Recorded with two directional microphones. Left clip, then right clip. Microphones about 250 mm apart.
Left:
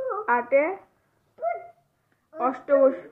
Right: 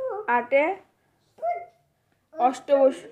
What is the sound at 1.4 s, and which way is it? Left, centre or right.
Dog, centre.